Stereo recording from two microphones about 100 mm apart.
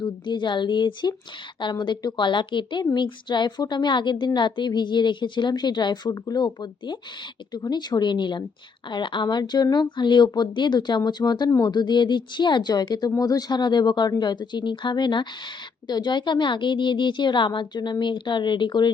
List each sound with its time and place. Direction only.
0.0 s a woman's voice: 50° left (ahead or behind)